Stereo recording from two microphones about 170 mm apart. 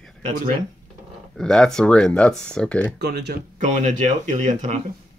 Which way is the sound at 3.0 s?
75° right (ahead or behind).